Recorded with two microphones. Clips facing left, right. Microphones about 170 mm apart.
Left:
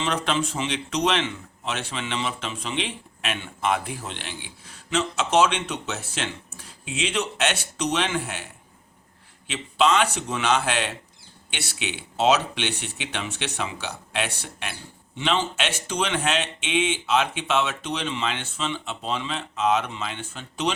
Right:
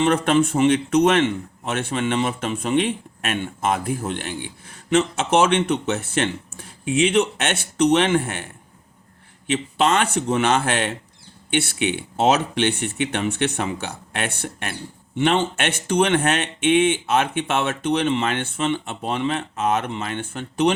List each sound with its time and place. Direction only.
0.0 s speech: 50° right (ahead or behind)
9.5 s speech: 55° right (ahead or behind)